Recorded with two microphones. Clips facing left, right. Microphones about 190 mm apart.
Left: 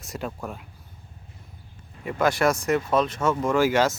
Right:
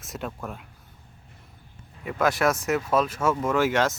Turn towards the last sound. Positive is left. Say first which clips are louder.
# left 2 dB
turn(degrees=0)  # may be behind; listen again after turning